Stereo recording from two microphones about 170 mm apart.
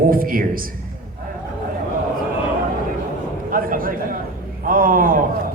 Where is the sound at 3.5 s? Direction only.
55° right (ahead or behind).